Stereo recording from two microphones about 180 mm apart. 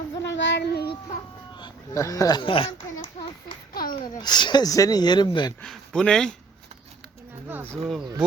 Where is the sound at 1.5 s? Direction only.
20° left (ahead or behind).